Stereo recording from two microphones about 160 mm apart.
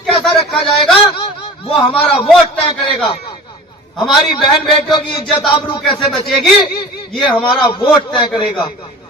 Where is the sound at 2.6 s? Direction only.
35° left (ahead or behind).